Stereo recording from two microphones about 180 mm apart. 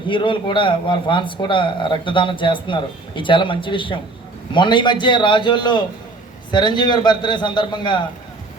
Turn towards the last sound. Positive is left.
turn(degrees=25)  # may be behind; listen again after turning